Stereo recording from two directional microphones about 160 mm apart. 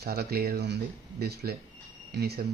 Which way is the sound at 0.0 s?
80° right.